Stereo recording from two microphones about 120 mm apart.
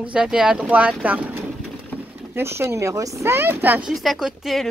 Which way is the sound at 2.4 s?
20° right (ahead or behind).